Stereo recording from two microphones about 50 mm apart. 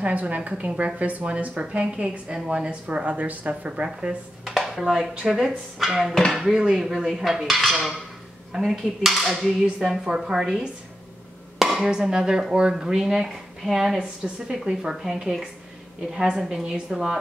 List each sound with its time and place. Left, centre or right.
0.0 s a woman's voice: right
4.5 s dishes: centre
5.2 s speech: centre
5.8 s dishes: centre
6.5 s speech: centre
8.5 s dishes: centre
9.6 s speech: centre
11.5 s a sound: centre
11.8 s speech: centre